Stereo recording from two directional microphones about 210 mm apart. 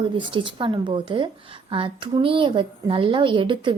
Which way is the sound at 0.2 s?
25° right (ahead or behind).